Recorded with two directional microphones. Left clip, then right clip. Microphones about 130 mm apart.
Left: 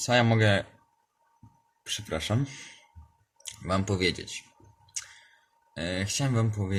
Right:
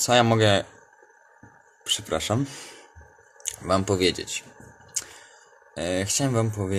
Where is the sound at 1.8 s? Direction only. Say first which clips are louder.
Right 6 dB; 10° left (ahead or behind).